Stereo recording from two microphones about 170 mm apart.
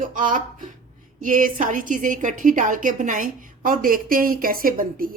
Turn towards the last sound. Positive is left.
turn(degrees=-55)  # may be behind; listen again after turning